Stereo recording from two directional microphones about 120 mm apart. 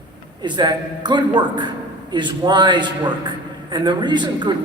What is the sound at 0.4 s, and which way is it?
A man's voice, 40° right (ahead or behind).